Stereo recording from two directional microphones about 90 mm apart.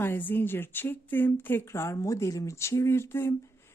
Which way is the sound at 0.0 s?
20° left (ahead or behind).